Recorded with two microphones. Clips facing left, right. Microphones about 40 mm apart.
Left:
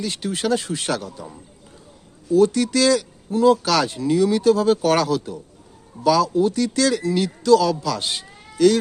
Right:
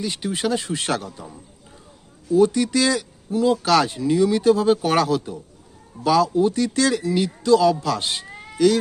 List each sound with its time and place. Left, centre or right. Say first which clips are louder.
0.0 s speech: even; centre
0.7 s speech: even; right
2.3 s speech: even; centre
3.2 s speech: left 4 dB; centre
3.6 s speech: right 2 dB; right
3.8 s speech: even; centre
6.0 s speech: even; right
7.8 s speech: right 1 dB; right
8.5 s speech: left 1 dB; centre